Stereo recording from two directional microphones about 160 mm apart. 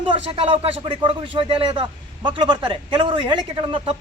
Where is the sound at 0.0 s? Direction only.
35° right (ahead or behind).